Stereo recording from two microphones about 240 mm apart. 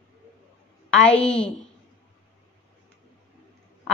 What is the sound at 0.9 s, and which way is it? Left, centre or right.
Speech, centre.